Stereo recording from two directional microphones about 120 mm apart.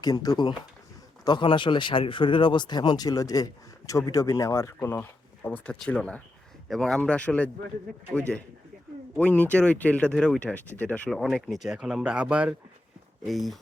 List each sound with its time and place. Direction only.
0.0 s speech: 30° left (ahead or behind); by 7.5 s 10° left (ahead or behind)
9.1 s speech: 10° left (ahead or behind)
11.1 s speech: centre (ahead or behind)
13.2 s speech: centre (ahead or behind)